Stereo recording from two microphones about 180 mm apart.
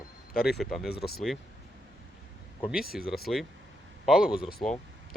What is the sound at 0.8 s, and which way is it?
Speech, 60° left (ahead or behind).